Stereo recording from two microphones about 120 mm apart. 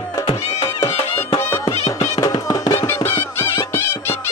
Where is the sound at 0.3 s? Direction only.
50° left (ahead or behind).